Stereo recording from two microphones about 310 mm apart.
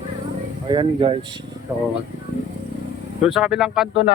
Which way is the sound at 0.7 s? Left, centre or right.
Centre.